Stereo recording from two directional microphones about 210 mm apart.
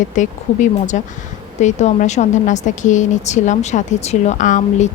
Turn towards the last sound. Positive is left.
turn(degrees=35)  # may be behind; listen again after turning